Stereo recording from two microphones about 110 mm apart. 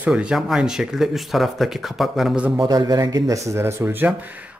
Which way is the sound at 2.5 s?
35° right (ahead or behind).